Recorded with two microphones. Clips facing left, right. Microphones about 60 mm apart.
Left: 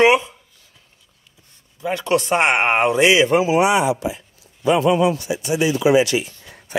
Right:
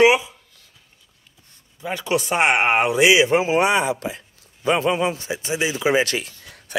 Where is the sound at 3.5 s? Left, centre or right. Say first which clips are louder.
Left 2 dB; right.